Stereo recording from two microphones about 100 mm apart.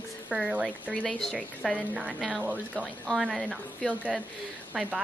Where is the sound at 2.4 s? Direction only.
15° right (ahead or behind).